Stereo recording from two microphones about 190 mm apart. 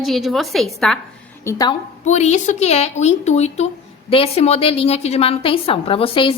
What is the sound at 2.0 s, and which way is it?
A woman's voice, 35° left (ahead or behind).